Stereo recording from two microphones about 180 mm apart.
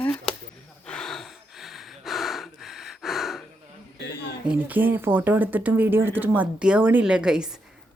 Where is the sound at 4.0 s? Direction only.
70° left (ahead or behind).